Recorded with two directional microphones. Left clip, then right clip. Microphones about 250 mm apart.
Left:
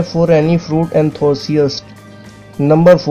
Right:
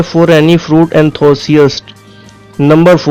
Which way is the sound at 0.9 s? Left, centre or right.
Right.